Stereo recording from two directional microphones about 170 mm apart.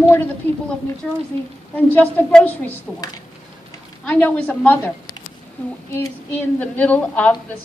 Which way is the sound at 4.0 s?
10° left (ahead or behind).